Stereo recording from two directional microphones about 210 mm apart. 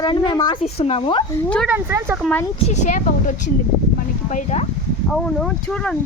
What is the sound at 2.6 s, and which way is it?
A woman's voice, 35° left (ahead or behind).